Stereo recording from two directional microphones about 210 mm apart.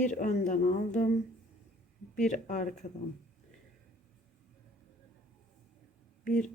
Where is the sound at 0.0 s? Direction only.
35° left (ahead or behind).